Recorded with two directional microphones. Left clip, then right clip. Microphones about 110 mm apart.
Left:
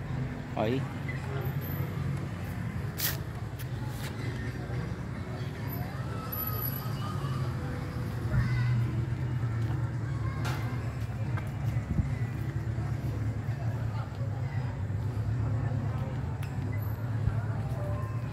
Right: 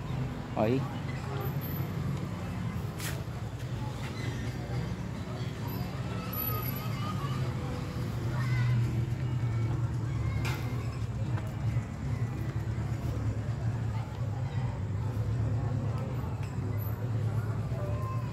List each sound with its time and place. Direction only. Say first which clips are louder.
0.6 s speech: right 1 dB; 60° right (ahead or behind)